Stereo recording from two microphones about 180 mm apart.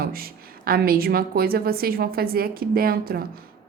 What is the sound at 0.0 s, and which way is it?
A woman's voice, 55° right (ahead or behind).